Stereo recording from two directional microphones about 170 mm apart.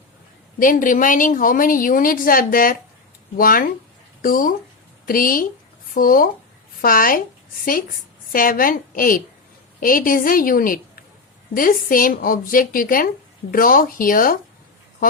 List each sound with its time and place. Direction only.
0.6 s a woman's voice: 55° left (ahead or behind)